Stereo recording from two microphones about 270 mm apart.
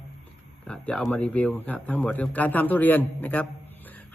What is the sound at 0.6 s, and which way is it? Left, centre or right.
A man's voice, centre.